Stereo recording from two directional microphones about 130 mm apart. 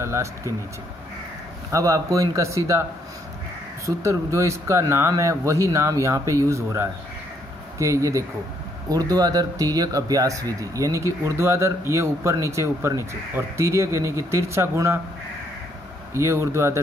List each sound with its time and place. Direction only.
0.0 s speech: 20° right (ahead or behind)
1.7 s speech: 25° right (ahead or behind)
3.8 s speech: 25° right (ahead or behind)
16.1 s speech: 20° right (ahead or behind)